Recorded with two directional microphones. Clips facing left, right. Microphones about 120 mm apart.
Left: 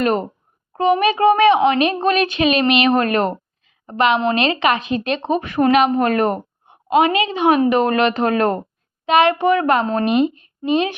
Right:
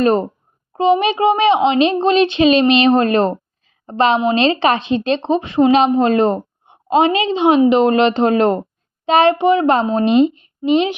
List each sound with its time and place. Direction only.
0.0 s speech: 30° right (ahead or behind)
0.7 s a woman's voice: 20° right (ahead or behind)